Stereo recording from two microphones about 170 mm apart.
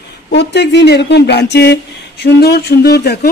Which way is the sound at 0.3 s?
85° left.